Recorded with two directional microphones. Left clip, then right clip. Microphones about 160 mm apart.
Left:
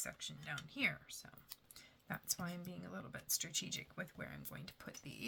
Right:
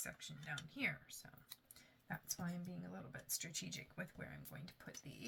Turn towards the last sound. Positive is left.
turn(degrees=35)  # may be behind; listen again after turning